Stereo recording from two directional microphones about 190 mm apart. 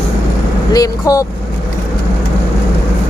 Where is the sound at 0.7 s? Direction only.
20° left (ahead or behind).